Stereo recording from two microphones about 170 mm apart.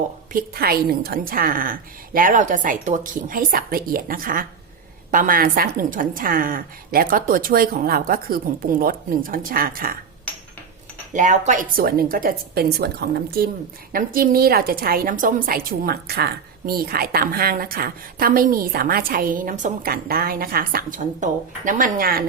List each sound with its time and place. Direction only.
0.3 s a woman's voice: 60° right (ahead or behind)
11.1 s a woman's voice: 45° right (ahead or behind)